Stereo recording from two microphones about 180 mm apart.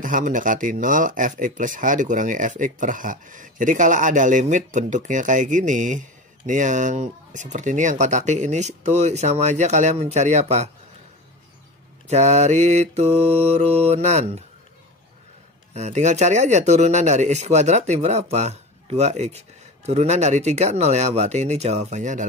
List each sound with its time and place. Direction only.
0.0 s speech: 45° right (ahead or behind)
12.1 s speech: 40° right (ahead or behind)
15.7 s speech: 40° right (ahead or behind)